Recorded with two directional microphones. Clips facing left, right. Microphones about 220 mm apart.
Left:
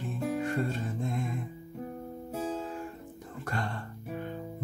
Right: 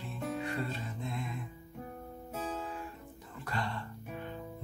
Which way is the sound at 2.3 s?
30° left (ahead or behind).